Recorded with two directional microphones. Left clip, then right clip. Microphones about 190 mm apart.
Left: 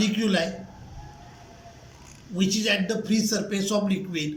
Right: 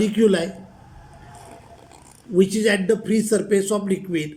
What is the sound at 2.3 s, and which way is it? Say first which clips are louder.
A man's voice: right 6 dB; 40° right (ahead or behind).